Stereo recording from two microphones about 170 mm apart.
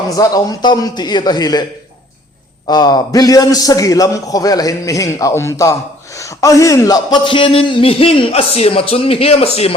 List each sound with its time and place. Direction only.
0.2 s a man's voice: 25° left (ahead or behind)
2.6 s a man's voice: 25° left (ahead or behind)